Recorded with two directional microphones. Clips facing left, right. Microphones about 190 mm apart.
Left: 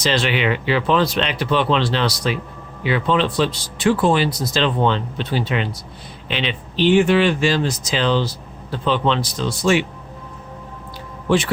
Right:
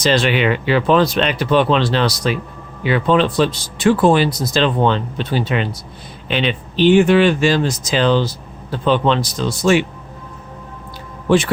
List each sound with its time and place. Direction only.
0.0 s speech: 45° right (ahead or behind)
11.3 s speech: 50° right (ahead or behind)